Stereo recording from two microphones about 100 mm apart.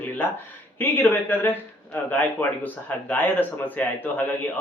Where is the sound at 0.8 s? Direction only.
20° left (ahead or behind).